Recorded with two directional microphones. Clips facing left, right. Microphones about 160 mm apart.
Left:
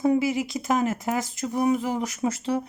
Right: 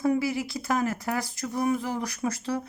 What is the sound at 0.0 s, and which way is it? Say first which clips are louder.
Speech: left 3 dB; 20° left (ahead or behind).